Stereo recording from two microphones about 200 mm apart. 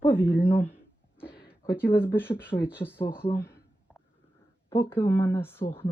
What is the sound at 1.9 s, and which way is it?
A woman's voice, 10° left (ahead or behind).